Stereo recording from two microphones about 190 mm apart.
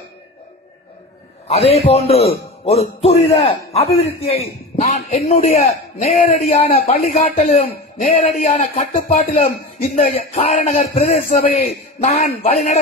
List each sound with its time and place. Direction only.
1.5 s a man's voice: 35° left (ahead or behind)